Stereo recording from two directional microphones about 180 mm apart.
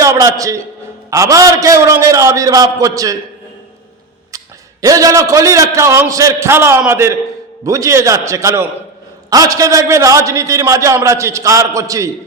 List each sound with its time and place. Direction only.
0.0 s a man's voice: 20° right (ahead or behind)
4.8 s a man's voice: 20° right (ahead or behind)